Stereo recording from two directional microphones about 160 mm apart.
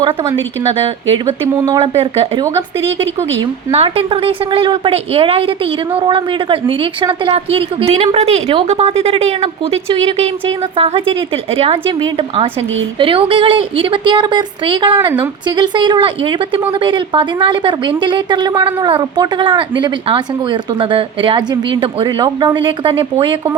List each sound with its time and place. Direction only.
1.5 s speech: 20° right (ahead or behind)
1.8 s a woman's voice: 35° right (ahead or behind)
3.7 s a woman's voice: 40° right (ahead or behind)